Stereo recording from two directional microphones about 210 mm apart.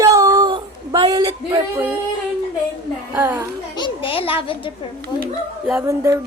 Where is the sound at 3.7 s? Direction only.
25° left (ahead or behind).